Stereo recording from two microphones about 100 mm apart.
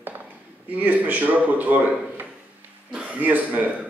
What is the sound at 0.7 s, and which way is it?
Speech, 15° right (ahead or behind).